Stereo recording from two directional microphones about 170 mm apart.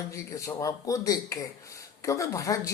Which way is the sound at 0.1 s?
20° left (ahead or behind).